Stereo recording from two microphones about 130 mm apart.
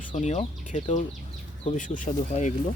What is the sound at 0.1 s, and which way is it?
Speech, 60° left (ahead or behind).